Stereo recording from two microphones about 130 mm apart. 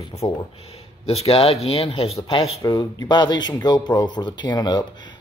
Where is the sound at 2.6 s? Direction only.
30° left (ahead or behind).